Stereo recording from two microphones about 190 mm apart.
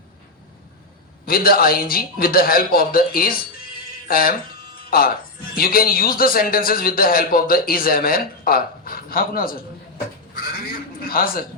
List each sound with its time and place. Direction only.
1.2 s a man's voice: 50° left (ahead or behind)
11.1 s a man's voice: 50° left (ahead or behind)